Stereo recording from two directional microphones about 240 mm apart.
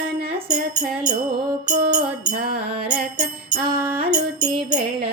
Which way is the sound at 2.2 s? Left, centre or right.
Right.